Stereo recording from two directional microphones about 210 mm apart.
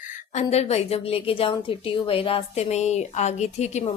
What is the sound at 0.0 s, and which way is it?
A woman's voice, 35° left (ahead or behind).